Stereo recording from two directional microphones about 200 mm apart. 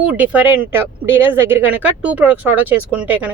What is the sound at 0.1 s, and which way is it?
Speech, 5° right (ahead or behind).